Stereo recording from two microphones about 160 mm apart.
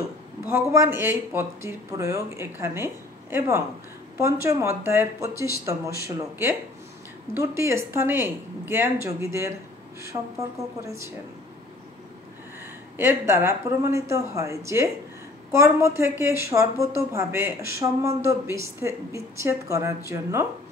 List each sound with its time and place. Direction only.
0.5 s speech: 15° right (ahead or behind)
12.9 s speech: 15° right (ahead or behind)